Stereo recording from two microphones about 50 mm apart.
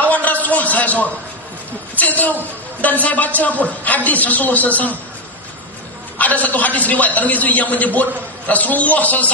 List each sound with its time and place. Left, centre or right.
0.1 s a sound: left
2.0 s a man's voice: left
6.1 s a man's voice: left